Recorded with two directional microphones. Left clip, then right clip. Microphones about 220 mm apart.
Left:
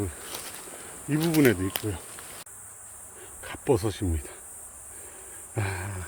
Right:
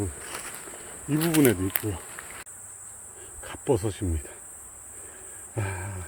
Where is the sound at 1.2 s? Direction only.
Centre (ahead or behind).